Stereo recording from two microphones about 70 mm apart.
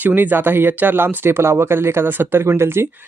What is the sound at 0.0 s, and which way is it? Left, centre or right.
Speech, right.